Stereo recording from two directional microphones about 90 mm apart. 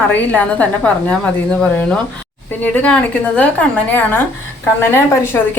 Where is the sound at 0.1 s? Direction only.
20° left (ahead or behind).